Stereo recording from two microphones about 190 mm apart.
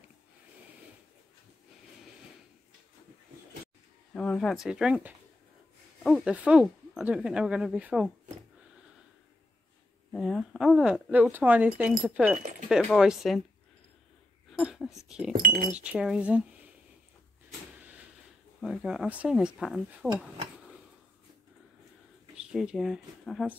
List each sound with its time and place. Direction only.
4.1 s speech: 5° left (ahead or behind)
10.1 s speech: centre (ahead or behind)
14.6 s speech: centre (ahead or behind)
15.3 s speech: 45° right (ahead or behind)
15.7 s speech: 5° right (ahead or behind)
18.6 s speech: 5° right (ahead or behind)
22.3 s speech: 5° right (ahead or behind)